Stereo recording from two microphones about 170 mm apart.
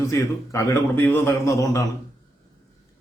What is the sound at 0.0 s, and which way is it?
A man's voice, 20° left (ahead or behind).